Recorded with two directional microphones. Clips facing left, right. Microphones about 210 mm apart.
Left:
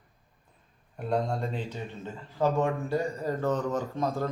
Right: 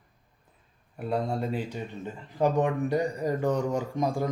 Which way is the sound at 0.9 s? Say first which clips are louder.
Even; 5° right (ahead or behind).